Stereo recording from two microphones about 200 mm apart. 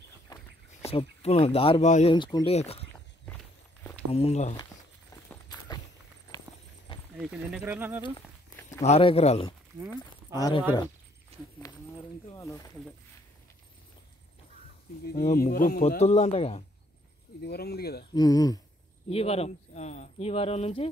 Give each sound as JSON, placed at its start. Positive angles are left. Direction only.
{"t": 0.3, "sound": "a sound", "side_deg": 20}
{"t": 0.8, "sound": "speech", "side_deg": 30}
{"t": 2.1, "sound": "speech", "side_deg": 25}
{"t": 4.1, "sound": "speech", "side_deg": 30}
{"t": 5.1, "sound": "walk", "side_deg": 20}
{"t": 7.2, "sound": "speech", "side_deg": -5}
{"t": 8.8, "sound": "speech", "side_deg": 30}
{"t": 10.3, "sound": "speech", "side_deg": 20}
{"t": 11.6, "sound": "speech", "side_deg": 15}
{"t": 15.3, "sound": "speech", "side_deg": 45}
{"t": 16.0, "sound": "speech", "side_deg": 30}
{"t": 17.4, "sound": "speech", "side_deg": 55}
{"t": 18.1, "sound": "speech", "side_deg": 20}
{"t": 19.0, "sound": "speech", "side_deg": 30}